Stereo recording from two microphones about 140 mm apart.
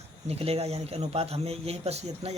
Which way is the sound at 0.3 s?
45° right (ahead or behind).